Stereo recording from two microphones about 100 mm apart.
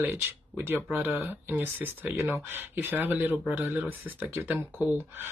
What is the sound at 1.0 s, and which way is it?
Speech, 20° right (ahead or behind).